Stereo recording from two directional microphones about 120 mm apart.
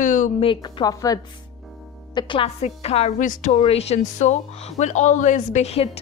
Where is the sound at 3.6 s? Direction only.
60° left (ahead or behind).